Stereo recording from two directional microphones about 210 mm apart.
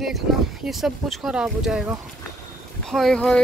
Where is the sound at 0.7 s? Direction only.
Centre (ahead or behind).